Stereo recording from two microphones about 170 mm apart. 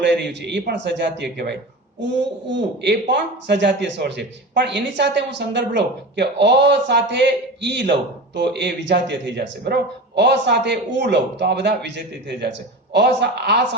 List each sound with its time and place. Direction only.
0.0 s a man's voice: 90° right